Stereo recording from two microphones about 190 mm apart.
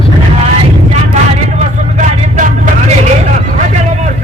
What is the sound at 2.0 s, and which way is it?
Vehicle, 40° right (ahead or behind).